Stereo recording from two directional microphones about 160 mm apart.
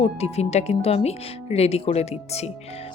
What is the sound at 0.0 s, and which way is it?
A woman's voice, 40° left (ahead or behind).